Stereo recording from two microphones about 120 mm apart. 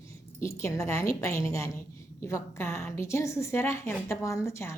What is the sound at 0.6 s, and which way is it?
Speech, 25° left (ahead or behind).